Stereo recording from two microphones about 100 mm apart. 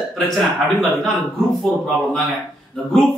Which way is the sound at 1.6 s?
Centre (ahead or behind).